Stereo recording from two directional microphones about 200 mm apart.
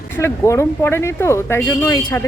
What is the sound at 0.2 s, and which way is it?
Speech, 15° left (ahead or behind).